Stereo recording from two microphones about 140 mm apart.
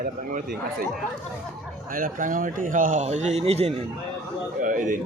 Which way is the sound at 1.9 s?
80° right.